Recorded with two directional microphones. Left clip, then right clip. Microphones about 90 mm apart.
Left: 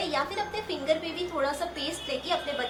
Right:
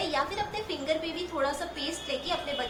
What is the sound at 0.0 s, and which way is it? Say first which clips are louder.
A woman's voice: even; 40° left (ahead or behind).